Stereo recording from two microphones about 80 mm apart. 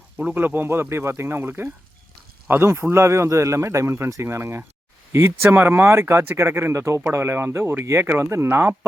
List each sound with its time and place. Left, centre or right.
0.3 s speech: right